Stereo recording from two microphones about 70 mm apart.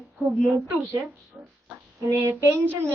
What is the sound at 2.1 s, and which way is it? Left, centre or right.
Speech, right.